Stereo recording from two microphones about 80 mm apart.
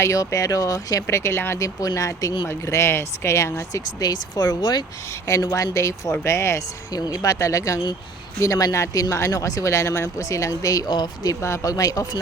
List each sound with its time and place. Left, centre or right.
0.0 s speech: left
1.5 s speech: left
5.3 s speech: left
6.9 s speech: left
10.8 s speech: left
11.4 s speech: left
11.7 s speech: left